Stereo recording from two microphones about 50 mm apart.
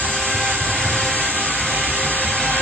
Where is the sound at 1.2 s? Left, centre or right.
Left.